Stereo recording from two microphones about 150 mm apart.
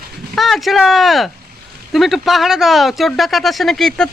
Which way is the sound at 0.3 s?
Centre (ahead or behind).